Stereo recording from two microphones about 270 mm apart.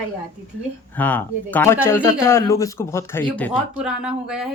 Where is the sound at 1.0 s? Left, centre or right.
Centre.